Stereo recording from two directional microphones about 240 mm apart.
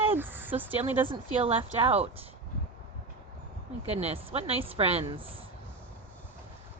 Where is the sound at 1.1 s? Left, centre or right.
Right.